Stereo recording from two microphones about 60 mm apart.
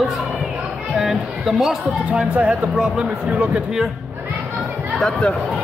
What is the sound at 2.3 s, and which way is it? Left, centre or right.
Speech, right.